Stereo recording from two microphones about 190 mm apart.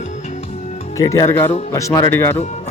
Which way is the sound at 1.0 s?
15° left (ahead or behind).